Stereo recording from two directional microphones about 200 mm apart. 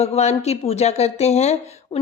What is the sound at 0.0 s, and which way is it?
Speech, 35° left (ahead or behind).